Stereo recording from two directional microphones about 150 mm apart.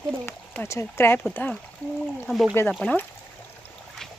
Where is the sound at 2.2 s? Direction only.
Centre (ahead or behind).